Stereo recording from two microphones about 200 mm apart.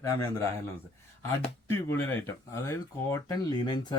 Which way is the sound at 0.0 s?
15° left (ahead or behind).